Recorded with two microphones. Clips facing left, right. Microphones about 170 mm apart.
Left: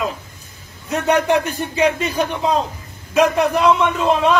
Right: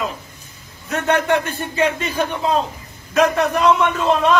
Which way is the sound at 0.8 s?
15° left (ahead or behind).